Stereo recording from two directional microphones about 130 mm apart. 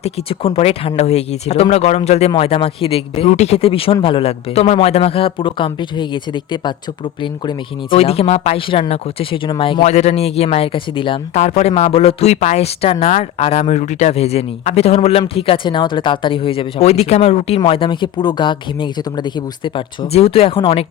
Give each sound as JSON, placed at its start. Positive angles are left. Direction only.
{"t": 0.0, "sound": "a man's voice", "side_deg": 45}
{"t": 11.3, "sound": "a man's voice", "side_deg": 55}
{"t": 17.7, "sound": "speech", "side_deg": 40}